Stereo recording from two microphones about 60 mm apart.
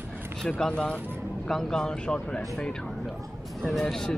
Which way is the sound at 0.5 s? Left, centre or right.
Centre.